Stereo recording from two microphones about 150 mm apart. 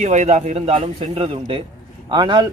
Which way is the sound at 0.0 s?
50° right (ahead or behind).